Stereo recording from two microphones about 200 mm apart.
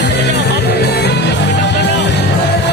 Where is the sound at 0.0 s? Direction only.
55° left (ahead or behind).